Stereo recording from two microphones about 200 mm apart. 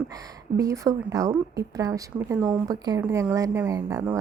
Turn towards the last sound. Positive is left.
turn(degrees=-15)  # may be behind; listen again after turning